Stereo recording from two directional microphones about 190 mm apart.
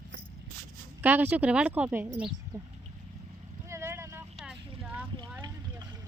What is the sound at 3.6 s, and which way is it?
Boat, 15° right (ahead or behind).